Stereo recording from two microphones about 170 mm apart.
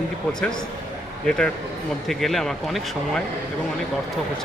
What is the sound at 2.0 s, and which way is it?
Speech, centre (ahead or behind).